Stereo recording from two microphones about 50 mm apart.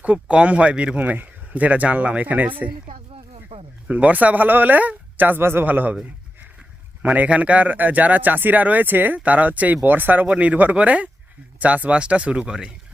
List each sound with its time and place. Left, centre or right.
0.0 s speech: right
3.8 s a man's voice: right
5.4 s a man's voice: right
5.6 s a man's voice: right
7.0 s a man's voice: right
10.2 s speech: right